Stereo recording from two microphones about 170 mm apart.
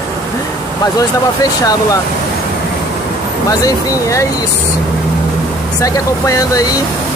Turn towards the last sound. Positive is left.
turn(degrees=20)  # may be behind; listen again after turning